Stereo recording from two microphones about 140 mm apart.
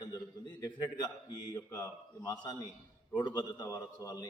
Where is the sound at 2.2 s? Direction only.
30° left (ahead or behind).